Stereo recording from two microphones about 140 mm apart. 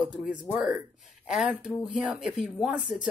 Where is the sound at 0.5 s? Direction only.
10° right (ahead or behind).